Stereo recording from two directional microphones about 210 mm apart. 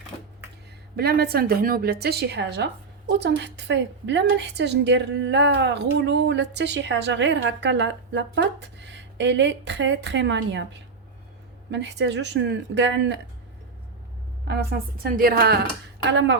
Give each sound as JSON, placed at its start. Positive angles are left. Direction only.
{"t": 0.1, "sound": "a sound", "side_deg": 20}
{"t": 0.9, "sound": "a woman's voice", "side_deg": -45}
{"t": 11.7, "sound": "a woman's voice", "side_deg": -55}
{"t": 14.4, "sound": "a woman's voice", "side_deg": -50}
{"t": 16.0, "sound": "a woman's voice", "side_deg": -60}